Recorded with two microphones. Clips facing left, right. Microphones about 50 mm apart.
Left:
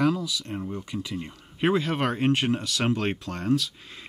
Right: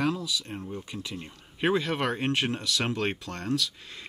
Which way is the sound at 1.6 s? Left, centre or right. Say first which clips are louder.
Left 2 dB; left.